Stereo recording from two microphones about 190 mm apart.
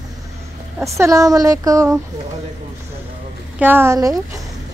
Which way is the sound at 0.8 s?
15° right (ahead or behind).